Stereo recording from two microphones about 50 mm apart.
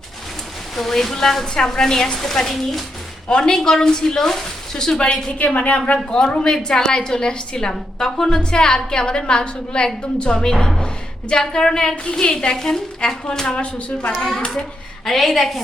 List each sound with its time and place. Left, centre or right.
0.8 s a woman's voice: centre
3.2 s a woman's voice: centre
4.9 s a woman's voice: left
14.1 s a woman's voice: centre